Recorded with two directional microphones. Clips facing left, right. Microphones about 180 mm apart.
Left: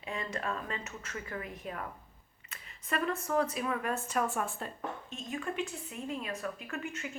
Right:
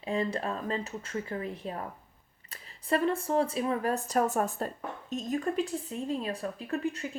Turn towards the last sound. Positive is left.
turn(degrees=-35)  # may be behind; listen again after turning